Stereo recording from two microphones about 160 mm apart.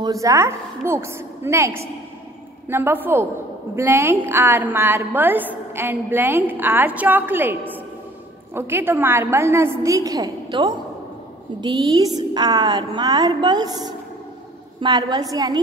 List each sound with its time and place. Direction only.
0.0 s a woman's voice: 20° right (ahead or behind)
11.6 s a woman's voice: 25° right (ahead or behind)